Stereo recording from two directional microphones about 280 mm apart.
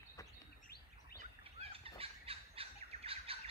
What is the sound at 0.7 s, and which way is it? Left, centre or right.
Bird vocalization, left.